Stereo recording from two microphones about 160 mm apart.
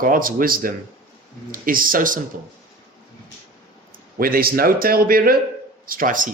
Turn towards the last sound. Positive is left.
turn(degrees=-60)  # may be behind; listen again after turning